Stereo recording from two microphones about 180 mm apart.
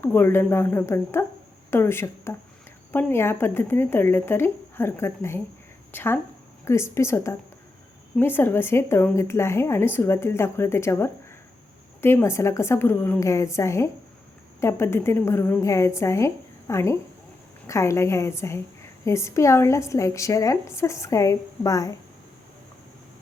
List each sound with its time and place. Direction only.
0.0 s a woman's voice: 10° left (ahead or behind)